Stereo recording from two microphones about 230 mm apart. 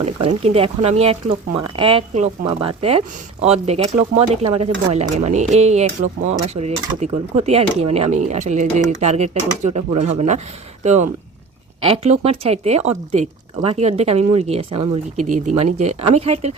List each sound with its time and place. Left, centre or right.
0.2 s speech: right